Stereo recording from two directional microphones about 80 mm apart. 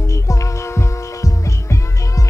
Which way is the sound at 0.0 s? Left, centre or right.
Left.